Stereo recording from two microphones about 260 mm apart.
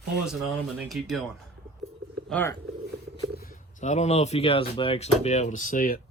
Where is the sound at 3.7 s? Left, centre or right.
Left.